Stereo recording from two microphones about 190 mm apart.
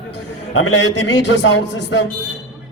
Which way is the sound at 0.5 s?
80° left.